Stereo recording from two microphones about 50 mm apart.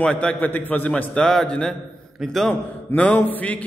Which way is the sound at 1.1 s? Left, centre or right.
Centre.